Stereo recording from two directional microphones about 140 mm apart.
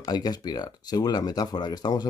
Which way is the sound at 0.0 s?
30° left (ahead or behind).